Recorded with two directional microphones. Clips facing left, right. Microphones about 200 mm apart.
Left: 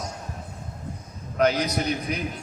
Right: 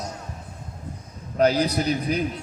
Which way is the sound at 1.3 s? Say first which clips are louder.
Right 2 dB; 35° right (ahead or behind).